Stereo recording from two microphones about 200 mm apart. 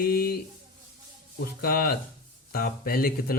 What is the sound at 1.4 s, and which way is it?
Speech, 50° left (ahead or behind).